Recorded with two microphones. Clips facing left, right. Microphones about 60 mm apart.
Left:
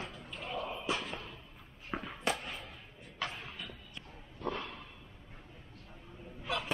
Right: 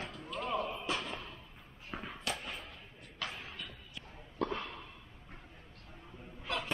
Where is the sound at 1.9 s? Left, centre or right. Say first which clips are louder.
Left 4 dB; left.